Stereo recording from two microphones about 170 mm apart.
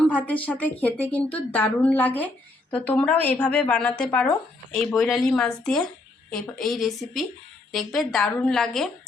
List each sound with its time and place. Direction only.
0.0 s speech: 10° left (ahead or behind)